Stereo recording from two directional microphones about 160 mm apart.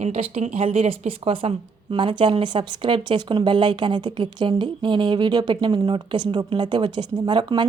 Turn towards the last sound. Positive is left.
turn(degrees=-30)  # may be behind; listen again after turning